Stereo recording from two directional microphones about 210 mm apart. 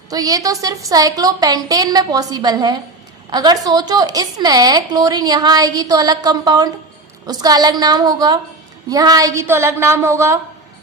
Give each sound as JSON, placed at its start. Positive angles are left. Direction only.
{"t": 0.1, "sound": "a woman's voice", "side_deg": -15}